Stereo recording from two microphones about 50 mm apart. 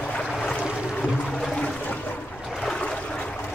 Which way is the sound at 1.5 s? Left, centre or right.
Left.